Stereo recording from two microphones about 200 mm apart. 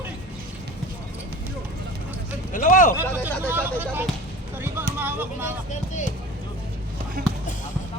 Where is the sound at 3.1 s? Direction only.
10° right (ahead or behind).